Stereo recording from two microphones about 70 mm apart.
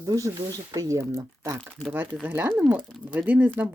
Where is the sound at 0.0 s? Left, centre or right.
Right.